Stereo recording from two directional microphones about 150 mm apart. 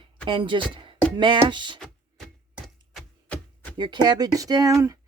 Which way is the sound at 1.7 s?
Centre (ahead or behind).